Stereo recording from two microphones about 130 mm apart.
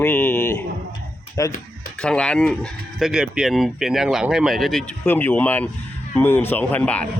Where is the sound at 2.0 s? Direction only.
10° left (ahead or behind).